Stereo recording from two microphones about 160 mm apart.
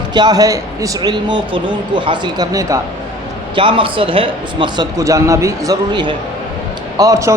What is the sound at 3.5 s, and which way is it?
Speech, 30° right (ahead or behind).